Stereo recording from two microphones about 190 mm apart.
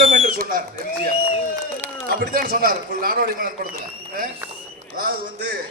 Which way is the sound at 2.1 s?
50° right (ahead or behind).